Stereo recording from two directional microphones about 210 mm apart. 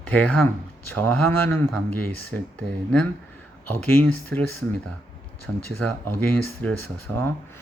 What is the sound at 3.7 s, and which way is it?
Speech, 10° left (ahead or behind).